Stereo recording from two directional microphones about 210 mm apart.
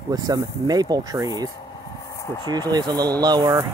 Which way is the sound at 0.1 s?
20° right (ahead or behind).